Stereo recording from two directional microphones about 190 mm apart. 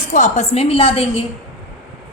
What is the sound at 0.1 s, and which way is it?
A woman's voice, 40° left (ahead or behind).